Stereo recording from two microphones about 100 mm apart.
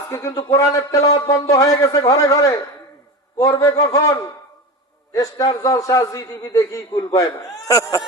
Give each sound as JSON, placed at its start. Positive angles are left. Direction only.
{"t": 0.3, "sound": "a man's voice", "side_deg": 35}
{"t": 5.1, "sound": "a man's voice", "side_deg": 40}